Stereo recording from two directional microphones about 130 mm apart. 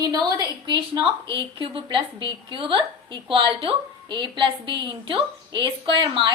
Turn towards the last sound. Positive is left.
turn(degrees=-40)  # may be behind; listen again after turning